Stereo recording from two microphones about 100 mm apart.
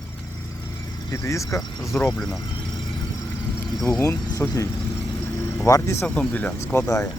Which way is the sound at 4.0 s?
30° left (ahead or behind).